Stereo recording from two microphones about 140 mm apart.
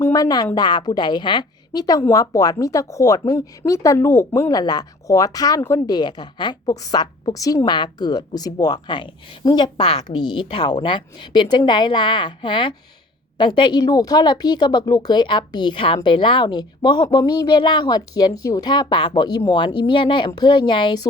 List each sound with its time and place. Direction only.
0.0 s a woman's voice: 25° left (ahead or behind)
5.9 s a woman's voice: 30° left (ahead or behind)